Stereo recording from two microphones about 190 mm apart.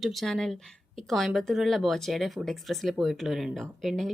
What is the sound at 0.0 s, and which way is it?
Speech, centre (ahead or behind).